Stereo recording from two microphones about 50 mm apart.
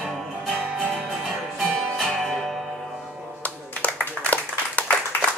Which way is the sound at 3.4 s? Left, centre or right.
Left.